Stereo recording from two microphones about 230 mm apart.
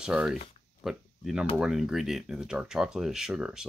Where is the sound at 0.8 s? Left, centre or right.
Centre.